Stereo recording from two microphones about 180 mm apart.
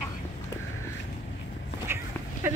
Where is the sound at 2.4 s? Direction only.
10° right (ahead or behind).